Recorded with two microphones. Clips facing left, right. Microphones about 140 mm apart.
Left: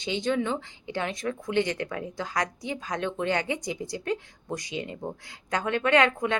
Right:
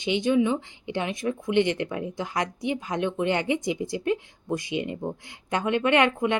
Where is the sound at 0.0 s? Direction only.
15° right (ahead or behind).